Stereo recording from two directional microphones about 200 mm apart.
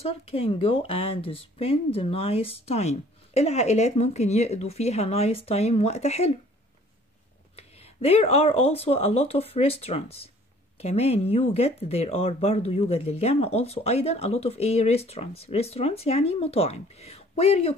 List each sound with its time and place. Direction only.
0.0 s speech: 30° left (ahead or behind)
7.5 s speech: 30° left (ahead or behind)